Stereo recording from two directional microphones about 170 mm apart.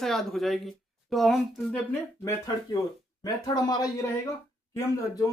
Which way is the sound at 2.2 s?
20° left (ahead or behind).